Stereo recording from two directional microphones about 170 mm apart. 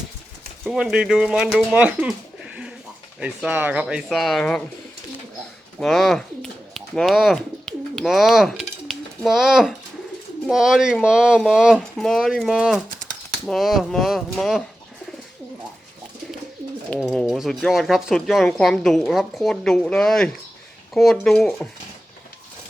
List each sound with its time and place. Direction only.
0.6 s speech: 5° right (ahead or behind)
5.8 s bird: centre (ahead or behind)
10.4 s speech: 5° right (ahead or behind)
16.9 s speech: 5° left (ahead or behind)